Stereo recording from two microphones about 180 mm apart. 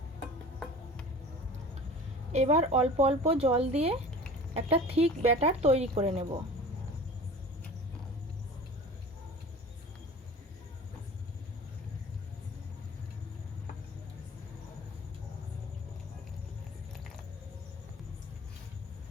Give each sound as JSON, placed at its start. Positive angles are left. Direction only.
{"t": 2.3, "sound": "speech", "side_deg": -40}